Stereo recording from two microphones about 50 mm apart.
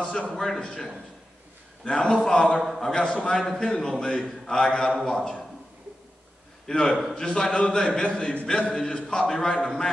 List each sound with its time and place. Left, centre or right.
0.3 s a man's voice: centre
1.9 s a man's voice: centre
2.6 s a man's voice: centre
2.9 s a man's voice: centre
6.7 s a man's voice: centre